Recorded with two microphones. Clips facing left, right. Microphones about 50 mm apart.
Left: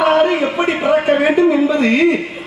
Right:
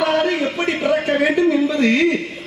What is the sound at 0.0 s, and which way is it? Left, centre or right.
A man's voice, centre.